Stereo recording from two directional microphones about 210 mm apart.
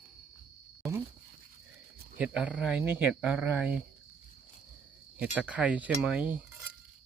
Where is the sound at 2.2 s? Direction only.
5° right (ahead or behind).